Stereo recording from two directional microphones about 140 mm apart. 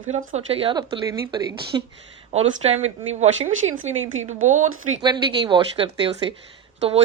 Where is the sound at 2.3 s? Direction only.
50° right (ahead or behind).